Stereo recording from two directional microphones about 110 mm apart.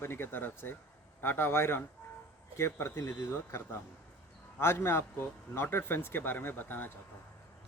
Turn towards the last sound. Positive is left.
turn(degrees=15)  # may be behind; listen again after turning